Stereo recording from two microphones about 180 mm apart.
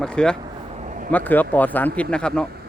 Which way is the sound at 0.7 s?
45° right (ahead or behind).